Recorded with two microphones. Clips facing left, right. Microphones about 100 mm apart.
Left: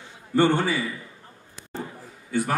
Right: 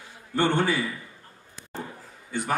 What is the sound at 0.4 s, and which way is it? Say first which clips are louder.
Speech: left 3 dB; 15° left (ahead or behind).